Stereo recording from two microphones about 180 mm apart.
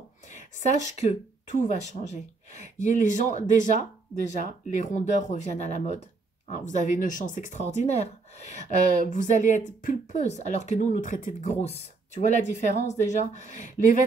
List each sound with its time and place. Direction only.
0.3 s speech: 40° left (ahead or behind)
2.5 s speech: 45° left (ahead or behind)